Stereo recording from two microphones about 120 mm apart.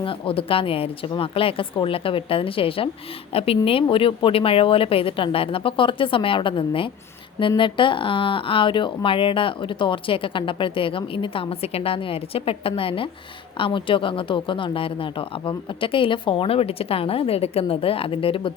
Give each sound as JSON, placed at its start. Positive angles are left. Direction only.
{"t": 0.0, "sound": "speech", "side_deg": 50}